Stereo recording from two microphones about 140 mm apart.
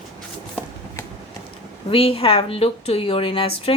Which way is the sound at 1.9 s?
40° left (ahead or behind).